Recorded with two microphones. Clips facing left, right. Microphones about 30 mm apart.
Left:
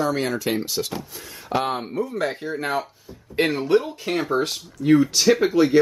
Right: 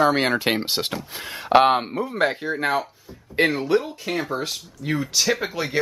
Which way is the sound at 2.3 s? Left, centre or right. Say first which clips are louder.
Right 3 dB; centre.